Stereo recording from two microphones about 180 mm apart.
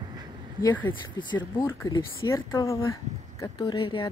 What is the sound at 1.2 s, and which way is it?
Speech, 25° left (ahead or behind).